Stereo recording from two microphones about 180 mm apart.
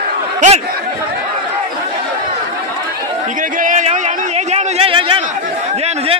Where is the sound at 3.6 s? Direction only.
45° right (ahead or behind).